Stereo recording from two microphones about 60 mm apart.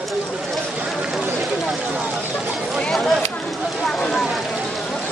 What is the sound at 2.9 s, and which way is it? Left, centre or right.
A woman's voice, centre.